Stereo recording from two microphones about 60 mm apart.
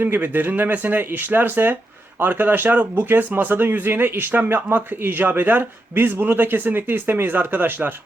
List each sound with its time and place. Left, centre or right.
0.0 s speech: right